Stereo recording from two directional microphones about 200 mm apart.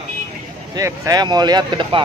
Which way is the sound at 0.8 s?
20° right (ahead or behind).